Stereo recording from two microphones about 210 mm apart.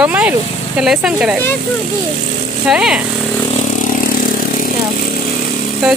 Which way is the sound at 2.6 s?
Centre (ahead or behind).